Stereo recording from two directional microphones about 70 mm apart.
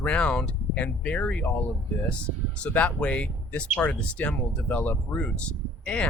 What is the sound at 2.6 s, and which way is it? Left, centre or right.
Speech, centre.